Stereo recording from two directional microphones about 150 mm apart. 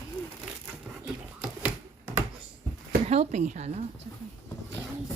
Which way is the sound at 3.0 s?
45° right (ahead or behind).